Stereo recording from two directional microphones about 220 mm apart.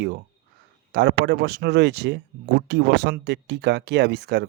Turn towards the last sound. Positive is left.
turn(degrees=-50)  # may be behind; listen again after turning